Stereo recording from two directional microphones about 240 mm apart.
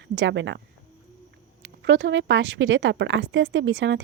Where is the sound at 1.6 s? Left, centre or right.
Right.